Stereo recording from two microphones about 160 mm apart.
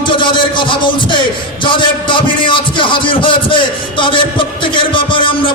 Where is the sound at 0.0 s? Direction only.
30° left (ahead or behind).